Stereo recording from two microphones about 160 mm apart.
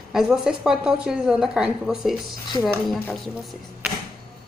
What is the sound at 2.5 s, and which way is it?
Speech, 30° left (ahead or behind).